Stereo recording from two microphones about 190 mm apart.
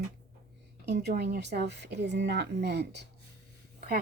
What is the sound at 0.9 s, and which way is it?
Speech, 60° right (ahead or behind).